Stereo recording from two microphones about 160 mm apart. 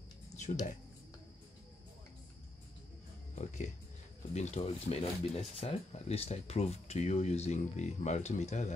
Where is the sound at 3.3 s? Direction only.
50° left (ahead or behind).